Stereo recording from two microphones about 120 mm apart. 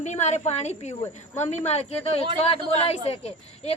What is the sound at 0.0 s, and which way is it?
A woman's voice, 75° left (ahead or behind).